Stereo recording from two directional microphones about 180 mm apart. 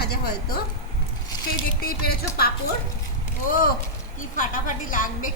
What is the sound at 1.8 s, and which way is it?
Speech, 60° left (ahead or behind).